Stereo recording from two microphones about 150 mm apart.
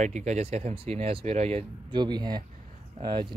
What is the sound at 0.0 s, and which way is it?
Speech, 50° right (ahead or behind).